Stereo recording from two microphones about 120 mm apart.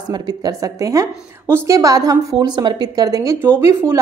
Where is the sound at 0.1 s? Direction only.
35° right (ahead or behind).